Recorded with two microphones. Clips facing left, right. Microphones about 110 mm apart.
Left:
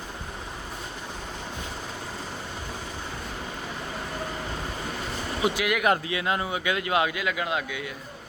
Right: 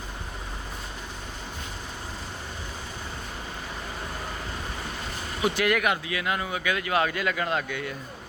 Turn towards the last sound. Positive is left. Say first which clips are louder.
# right 1 dB
turn(degrees=5)  # may be behind; listen again after turning